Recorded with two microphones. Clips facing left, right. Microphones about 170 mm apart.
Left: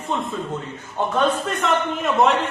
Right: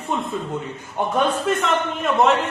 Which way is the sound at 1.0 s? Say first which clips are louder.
Even; 15° right (ahead or behind).